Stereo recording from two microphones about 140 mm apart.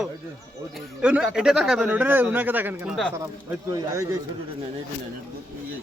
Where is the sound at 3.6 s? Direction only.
25° right (ahead or behind).